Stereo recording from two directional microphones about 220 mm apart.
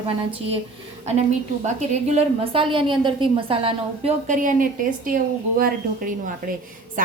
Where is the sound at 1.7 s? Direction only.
30° right (ahead or behind).